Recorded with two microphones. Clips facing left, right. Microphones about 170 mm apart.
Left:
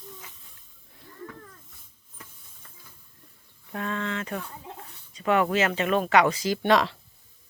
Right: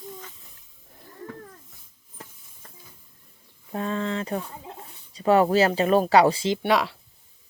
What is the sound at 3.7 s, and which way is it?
Speech, 30° right (ahead or behind).